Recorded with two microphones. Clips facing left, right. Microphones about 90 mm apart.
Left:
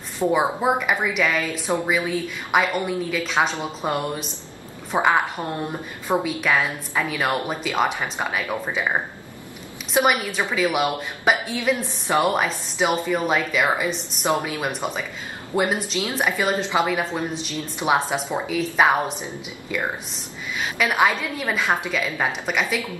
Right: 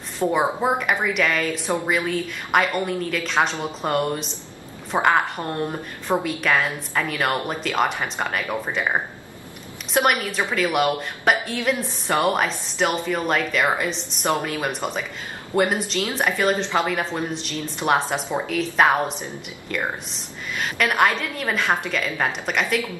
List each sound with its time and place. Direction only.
0.3 s a woman's voice: centre (ahead or behind)